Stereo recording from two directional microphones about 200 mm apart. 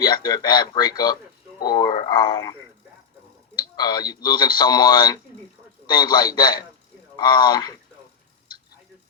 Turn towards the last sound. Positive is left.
turn(degrees=20)  # may be behind; listen again after turning